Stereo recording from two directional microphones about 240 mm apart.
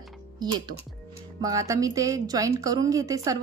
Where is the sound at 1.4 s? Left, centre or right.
Centre.